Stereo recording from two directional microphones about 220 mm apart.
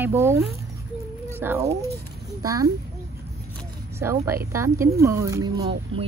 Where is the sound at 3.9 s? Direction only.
10° right (ahead or behind).